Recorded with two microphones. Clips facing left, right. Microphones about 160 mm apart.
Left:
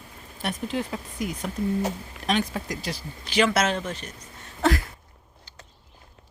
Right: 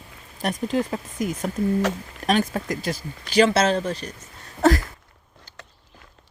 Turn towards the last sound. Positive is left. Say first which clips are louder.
# right 5 dB
turn(degrees=-40)  # may be behind; listen again after turning